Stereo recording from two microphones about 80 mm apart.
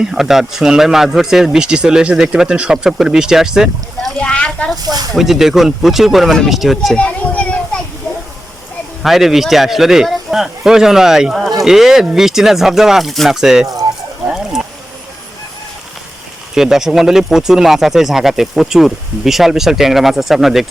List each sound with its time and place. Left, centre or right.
0.0 s speech: centre
4.2 s speech: centre
4.8 s speech: right
5.1 s speech: centre
6.9 s children playing: centre
9.0 s speech: centre
14.3 s a sound: centre
16.6 s speech: centre